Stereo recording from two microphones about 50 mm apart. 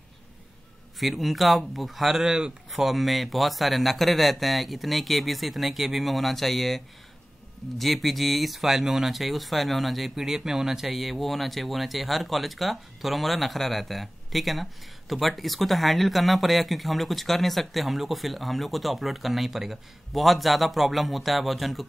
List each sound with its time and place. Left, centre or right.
0.9 s speech: centre
2.7 s speech: centre